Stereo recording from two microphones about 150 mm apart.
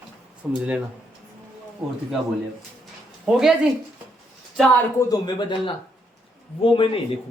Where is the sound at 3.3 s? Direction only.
5° right (ahead or behind).